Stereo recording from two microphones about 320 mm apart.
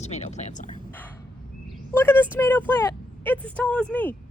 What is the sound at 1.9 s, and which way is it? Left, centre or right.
Speech, centre.